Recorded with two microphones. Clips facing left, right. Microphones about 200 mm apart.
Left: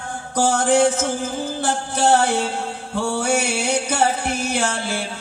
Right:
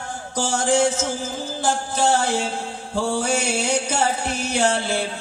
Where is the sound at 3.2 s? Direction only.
60° left (ahead or behind).